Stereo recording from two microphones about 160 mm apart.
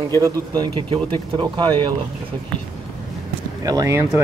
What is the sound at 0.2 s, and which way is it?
Speech, 25° right (ahead or behind).